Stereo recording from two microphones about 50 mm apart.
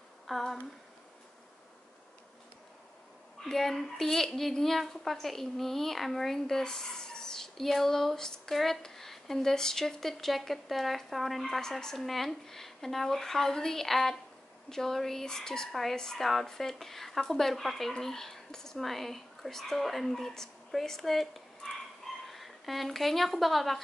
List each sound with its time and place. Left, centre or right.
0.3 s a woman's voice: centre
3.3 s a woman's voice: centre